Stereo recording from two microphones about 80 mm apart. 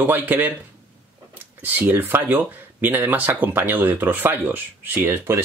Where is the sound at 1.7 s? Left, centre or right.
Right.